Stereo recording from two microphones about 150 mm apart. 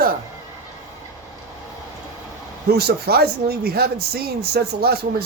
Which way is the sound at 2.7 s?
90° right.